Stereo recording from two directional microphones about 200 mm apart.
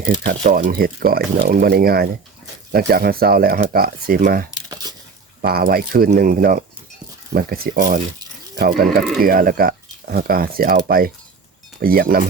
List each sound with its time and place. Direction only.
0.4 s speech: 40° right (ahead or behind)
4.7 s a sound: 20° right (ahead or behind)
5.4 s speech: 50° right (ahead or behind)